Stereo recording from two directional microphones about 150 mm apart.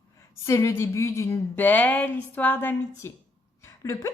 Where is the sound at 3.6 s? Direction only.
20° left (ahead or behind).